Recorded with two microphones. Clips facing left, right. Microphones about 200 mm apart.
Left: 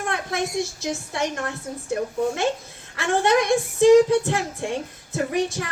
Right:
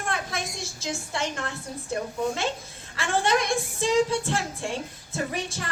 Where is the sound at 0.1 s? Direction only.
60° left (ahead or behind).